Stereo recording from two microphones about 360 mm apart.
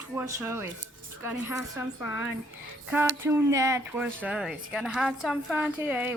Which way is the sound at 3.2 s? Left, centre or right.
Centre.